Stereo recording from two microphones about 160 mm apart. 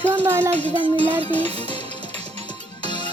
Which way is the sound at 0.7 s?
30° left (ahead or behind).